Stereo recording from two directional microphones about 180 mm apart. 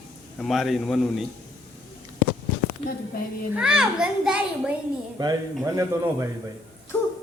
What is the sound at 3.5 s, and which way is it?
A child's voice, 5° right (ahead or behind).